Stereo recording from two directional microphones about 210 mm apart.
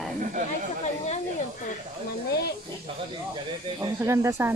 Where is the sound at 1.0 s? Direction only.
35° left (ahead or behind).